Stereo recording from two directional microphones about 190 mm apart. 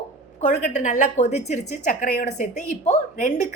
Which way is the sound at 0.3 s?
40° left (ahead or behind).